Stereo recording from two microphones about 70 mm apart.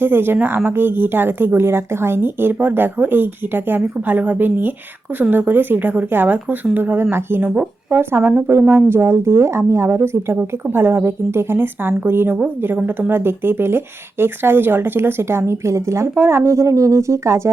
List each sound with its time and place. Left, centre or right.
0.0 s speech: right